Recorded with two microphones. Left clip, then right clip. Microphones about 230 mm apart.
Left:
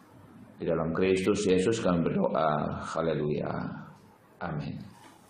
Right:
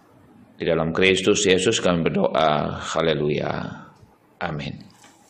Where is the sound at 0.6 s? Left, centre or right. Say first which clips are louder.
Right 8 dB; right.